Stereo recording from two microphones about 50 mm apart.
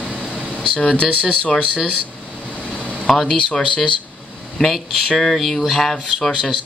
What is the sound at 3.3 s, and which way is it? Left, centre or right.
Speech, centre.